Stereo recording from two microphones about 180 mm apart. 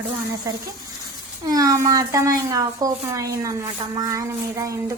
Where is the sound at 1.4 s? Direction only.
20° right (ahead or behind).